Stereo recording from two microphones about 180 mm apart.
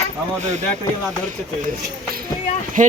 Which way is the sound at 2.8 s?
45° right (ahead or behind).